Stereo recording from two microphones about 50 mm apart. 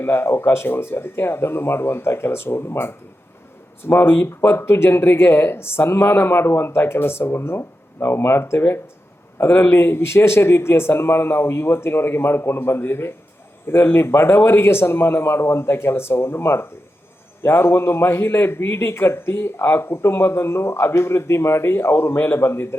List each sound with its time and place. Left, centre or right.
0.0 s a man's voice: left